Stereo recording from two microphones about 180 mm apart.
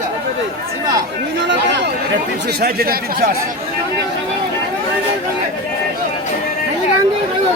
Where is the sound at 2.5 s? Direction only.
60° right (ahead or behind).